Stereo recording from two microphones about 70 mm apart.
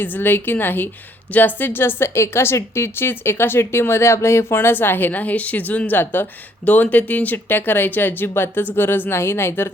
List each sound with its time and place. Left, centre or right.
0.0 s speech: left